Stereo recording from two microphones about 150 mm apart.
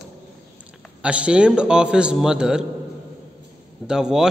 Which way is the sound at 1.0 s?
5° right (ahead or behind).